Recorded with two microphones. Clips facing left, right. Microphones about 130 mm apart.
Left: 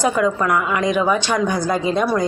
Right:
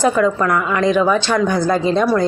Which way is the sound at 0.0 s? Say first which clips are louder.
Right 3 dB; 15° left (ahead or behind).